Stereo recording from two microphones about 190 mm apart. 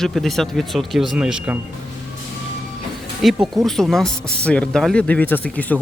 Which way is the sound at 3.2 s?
Centre (ahead or behind).